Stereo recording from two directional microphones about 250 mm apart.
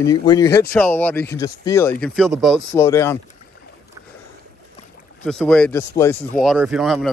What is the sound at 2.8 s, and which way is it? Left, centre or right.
Speech, centre.